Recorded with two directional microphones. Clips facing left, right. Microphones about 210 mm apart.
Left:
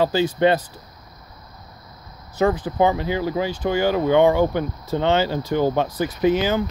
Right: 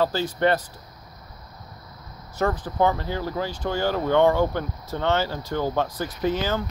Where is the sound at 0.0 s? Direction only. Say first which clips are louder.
Left 4 dB; 20° left (ahead or behind).